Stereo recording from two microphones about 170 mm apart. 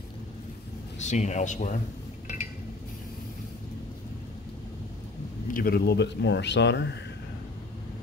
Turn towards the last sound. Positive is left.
turn(degrees=90)